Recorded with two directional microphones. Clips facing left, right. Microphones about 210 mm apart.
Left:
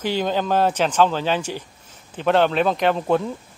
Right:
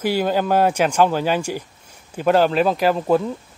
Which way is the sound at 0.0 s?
10° right (ahead or behind).